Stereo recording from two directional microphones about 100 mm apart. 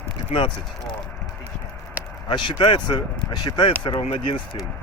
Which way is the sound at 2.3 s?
55° left (ahead or behind).